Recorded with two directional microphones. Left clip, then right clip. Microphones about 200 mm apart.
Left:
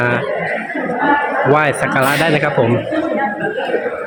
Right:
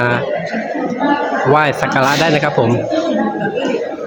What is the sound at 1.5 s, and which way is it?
Speech, centre (ahead or behind).